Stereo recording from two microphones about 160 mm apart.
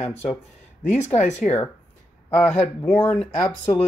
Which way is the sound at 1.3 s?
45° left (ahead or behind).